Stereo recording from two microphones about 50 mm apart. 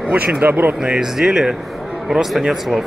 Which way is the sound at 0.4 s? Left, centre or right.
Right.